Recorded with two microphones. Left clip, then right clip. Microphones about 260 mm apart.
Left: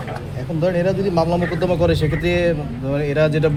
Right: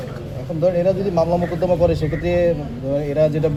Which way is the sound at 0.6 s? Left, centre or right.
Left.